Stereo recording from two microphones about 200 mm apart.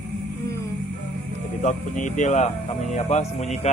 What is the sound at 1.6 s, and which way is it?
Speech, 40° left (ahead or behind).